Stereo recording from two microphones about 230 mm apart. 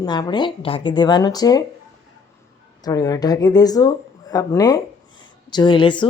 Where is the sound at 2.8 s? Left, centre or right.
Centre.